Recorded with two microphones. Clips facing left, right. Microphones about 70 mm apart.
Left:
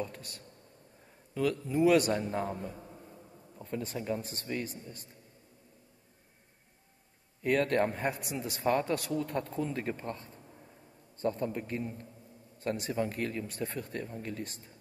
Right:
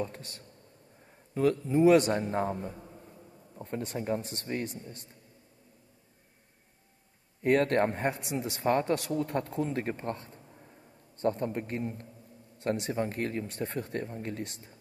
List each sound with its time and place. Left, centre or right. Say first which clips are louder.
0.0 s speech: right 3 dB; right
3.5 s speech: right 2 dB; right
7.4 s speech: right 3 dB; right